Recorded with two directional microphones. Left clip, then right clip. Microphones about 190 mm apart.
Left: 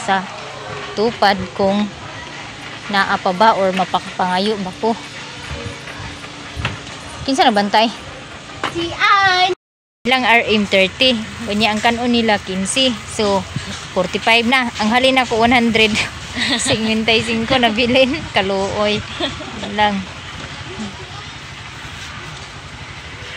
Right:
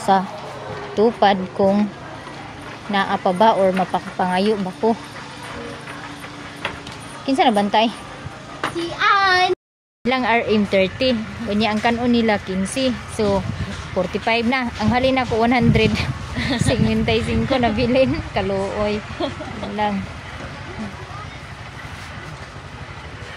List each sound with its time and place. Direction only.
1.0 s speech: 25° right (ahead or behind)
2.9 s speech: 15° right (ahead or behind)
7.2 s speech: 5° right (ahead or behind)
8.5 s a sound: 25° left (ahead or behind)
10.0 s a woman's voice: 5° right (ahead or behind)
19.2 s speech: 15° right (ahead or behind)
19.8 s a woman's voice: 10° left (ahead or behind)